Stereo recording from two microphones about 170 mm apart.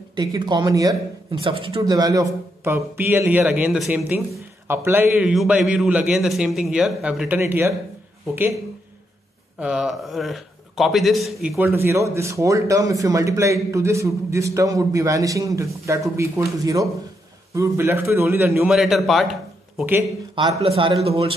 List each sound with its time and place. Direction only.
0.1 s speech: 25° right (ahead or behind)
1.4 s speech: 30° right (ahead or behind)
1.9 s a man's voice: 20° right (ahead or behind)
9.6 s a man's voice: 5° right (ahead or behind)
11.5 s speech: 15° right (ahead or behind)
18.7 s a man's voice: centre (ahead or behind)
20.6 s speech: 30° right (ahead or behind)